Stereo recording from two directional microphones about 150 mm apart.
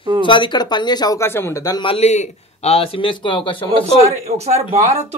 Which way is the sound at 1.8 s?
40° left (ahead or behind).